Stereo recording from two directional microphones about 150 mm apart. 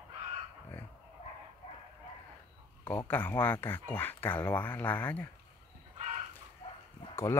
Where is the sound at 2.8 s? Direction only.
10° left (ahead or behind).